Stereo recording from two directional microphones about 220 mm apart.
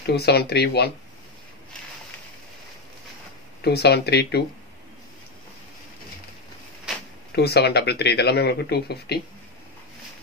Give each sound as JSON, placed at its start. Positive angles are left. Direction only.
{"t": 0.1, "sound": "speech", "side_deg": 45}
{"t": 3.6, "sound": "speech", "side_deg": 50}
{"t": 7.3, "sound": "speech", "side_deg": 50}